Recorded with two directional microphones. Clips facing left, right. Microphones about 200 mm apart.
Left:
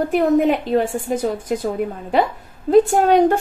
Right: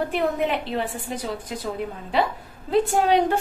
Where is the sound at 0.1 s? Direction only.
45° left (ahead or behind).